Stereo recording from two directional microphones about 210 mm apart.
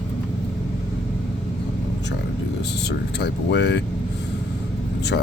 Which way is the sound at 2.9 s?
55° left (ahead or behind).